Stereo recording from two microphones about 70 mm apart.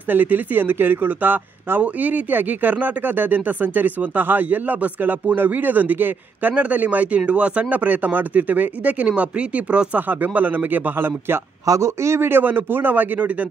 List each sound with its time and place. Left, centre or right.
0.1 s speech: right
11.6 s a man's voice: right